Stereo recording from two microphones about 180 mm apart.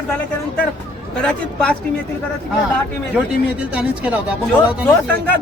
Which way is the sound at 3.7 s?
5° right (ahead or behind).